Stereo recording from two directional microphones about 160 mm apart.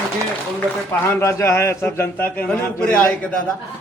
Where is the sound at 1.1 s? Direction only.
15° left (ahead or behind).